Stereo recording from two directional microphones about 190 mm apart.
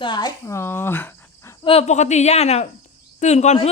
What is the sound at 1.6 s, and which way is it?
Speech, 30° left (ahead or behind).